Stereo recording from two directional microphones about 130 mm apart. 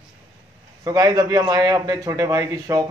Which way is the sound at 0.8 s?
30° right (ahead or behind).